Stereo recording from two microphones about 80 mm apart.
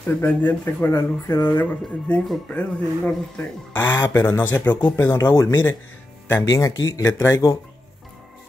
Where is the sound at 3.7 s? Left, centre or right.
Left.